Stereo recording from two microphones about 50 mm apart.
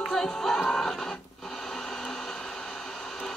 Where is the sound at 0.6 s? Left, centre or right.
Centre.